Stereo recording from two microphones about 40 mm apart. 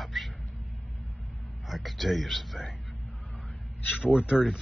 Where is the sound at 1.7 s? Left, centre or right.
Centre.